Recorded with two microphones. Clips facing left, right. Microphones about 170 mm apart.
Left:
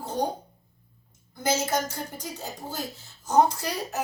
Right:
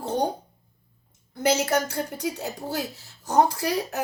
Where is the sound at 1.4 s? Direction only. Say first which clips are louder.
Right 4 dB; 70° right (ahead or behind).